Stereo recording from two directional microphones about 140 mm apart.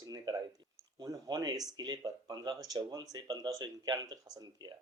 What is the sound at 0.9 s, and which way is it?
Speech, 25° right (ahead or behind).